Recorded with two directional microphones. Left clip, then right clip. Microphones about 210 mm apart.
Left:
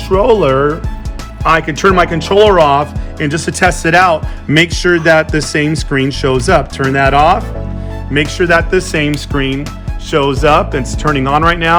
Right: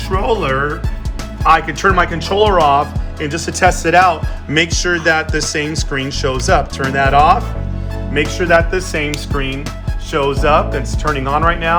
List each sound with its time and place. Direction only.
1.5 s speech: 45° left (ahead or behind)